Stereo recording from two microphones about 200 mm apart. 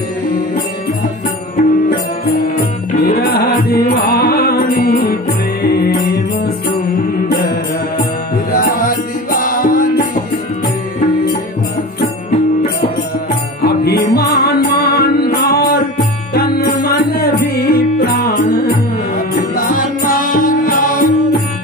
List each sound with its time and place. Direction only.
3.0 s music: 50° left (ahead or behind)
8.8 s music: 45° left (ahead or behind)
13.7 s music: 50° left (ahead or behind)